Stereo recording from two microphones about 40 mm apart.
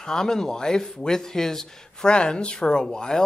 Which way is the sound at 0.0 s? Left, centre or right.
Centre.